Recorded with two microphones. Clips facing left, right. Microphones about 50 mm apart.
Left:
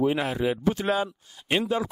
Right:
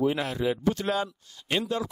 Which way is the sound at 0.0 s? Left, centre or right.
Centre.